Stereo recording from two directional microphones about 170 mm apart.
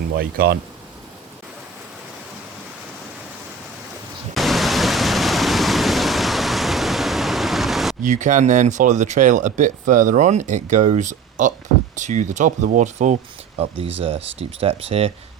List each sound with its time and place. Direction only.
0.2 s speech: 60° right (ahead or behind)
4.4 s pink noise: centre (ahead or behind)
8.0 s speech: 45° right (ahead or behind)
14.3 s speech: 35° right (ahead or behind)